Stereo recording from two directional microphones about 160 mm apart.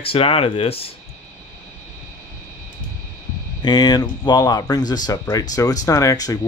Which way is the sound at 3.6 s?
25° left (ahead or behind).